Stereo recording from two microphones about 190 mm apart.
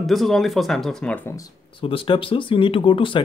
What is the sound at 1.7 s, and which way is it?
Speech, 30° left (ahead or behind).